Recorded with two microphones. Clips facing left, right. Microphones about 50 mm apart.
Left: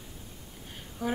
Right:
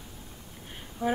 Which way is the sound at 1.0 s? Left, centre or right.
Right.